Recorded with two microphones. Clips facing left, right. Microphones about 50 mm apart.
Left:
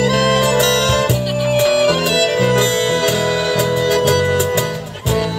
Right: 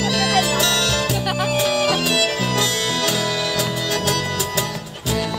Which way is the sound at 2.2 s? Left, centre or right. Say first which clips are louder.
Left 6 dB; left.